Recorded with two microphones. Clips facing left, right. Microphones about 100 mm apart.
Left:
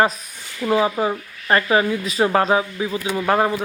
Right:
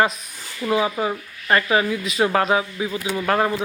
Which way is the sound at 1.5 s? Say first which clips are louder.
Left 2 dB; 25° left (ahead or behind).